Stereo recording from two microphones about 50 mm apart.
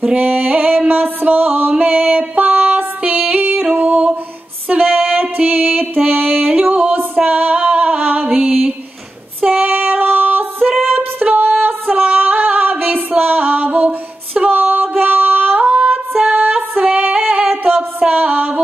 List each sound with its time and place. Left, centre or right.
0.2 s music: right
6.4 s music: right
7.2 s female singing: right
8.4 s a sound: right
9.5 s female singing: right
13.2 s music: right
17.1 s singing: right
18.1 s music: right